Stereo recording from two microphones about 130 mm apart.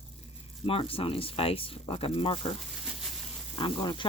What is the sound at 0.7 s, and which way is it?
Speech, 45° left (ahead or behind).